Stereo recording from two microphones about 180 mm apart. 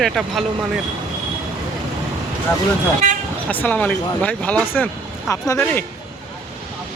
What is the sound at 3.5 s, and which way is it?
Speech, 10° left (ahead or behind).